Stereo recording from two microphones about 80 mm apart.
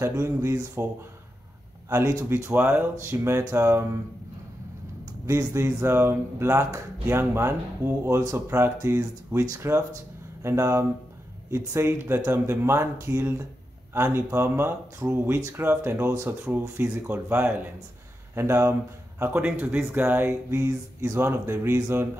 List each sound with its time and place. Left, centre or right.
0.4 s speech: right
2.2 s speech: right
5.2 s speech: right
6.4 s speech: right
8.2 s speech: right
8.5 s speech: right
20.6 s speech: right
21.2 s speech: right